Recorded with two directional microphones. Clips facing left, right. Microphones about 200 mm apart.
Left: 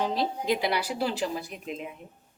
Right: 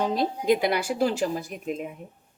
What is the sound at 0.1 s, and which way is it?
A woman's voice, 50° right (ahead or behind).